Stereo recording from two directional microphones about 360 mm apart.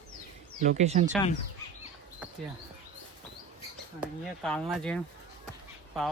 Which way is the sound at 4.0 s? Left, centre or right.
Centre.